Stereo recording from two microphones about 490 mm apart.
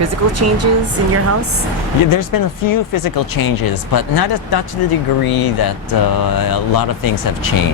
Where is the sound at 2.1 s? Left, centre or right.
Left.